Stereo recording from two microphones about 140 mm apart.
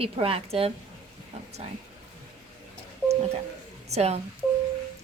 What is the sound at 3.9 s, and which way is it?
Speech, 50° right (ahead or behind).